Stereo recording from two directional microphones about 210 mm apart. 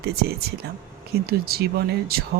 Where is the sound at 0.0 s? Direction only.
50° right (ahead or behind).